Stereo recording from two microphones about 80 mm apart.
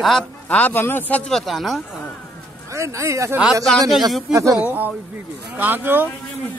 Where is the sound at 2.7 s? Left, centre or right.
Right.